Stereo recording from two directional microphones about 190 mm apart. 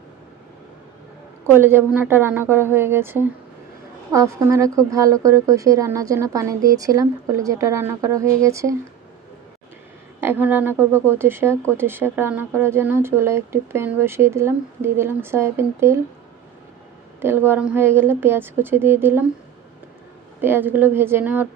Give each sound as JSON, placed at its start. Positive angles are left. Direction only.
{"t": 1.5, "sound": "speech", "side_deg": -10}
{"t": 10.2, "sound": "speech", "side_deg": -10}
{"t": 17.2, "sound": "speech", "side_deg": -10}
{"t": 20.4, "sound": "speech", "side_deg": -10}